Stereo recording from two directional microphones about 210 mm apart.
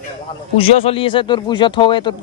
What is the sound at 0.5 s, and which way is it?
Speech, 25° left (ahead or behind).